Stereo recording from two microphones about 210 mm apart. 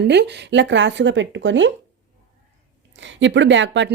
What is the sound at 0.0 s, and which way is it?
A woman's voice, 55° right (ahead or behind).